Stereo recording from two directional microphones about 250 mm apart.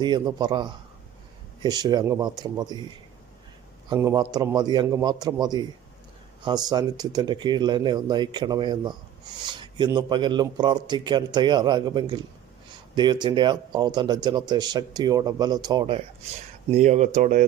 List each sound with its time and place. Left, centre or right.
0.0 s speech: centre
3.8 s speech: centre; by 17.4 s right